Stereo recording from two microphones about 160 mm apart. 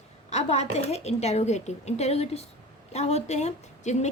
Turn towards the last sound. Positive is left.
turn(degrees=45)  # may be behind; listen again after turning